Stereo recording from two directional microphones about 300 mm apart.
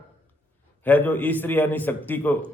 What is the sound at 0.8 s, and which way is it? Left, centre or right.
A man's voice, centre.